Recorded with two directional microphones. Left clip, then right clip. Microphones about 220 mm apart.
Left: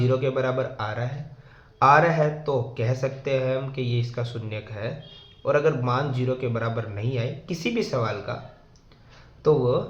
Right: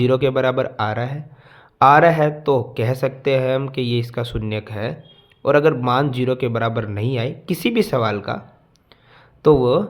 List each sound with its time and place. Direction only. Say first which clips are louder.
0.0 s speech: right 7 dB; 50° right (ahead or behind)
9.4 s speech: right 7 dB; 50° right (ahead or behind)